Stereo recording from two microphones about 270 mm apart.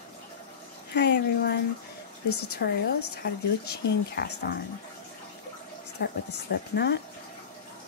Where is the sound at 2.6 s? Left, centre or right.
Left.